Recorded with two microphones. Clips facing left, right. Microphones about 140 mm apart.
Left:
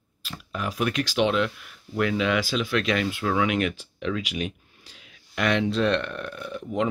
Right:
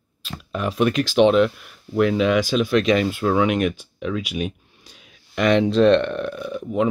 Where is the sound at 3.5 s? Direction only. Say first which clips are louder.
Right 4 dB; 10° right (ahead or behind).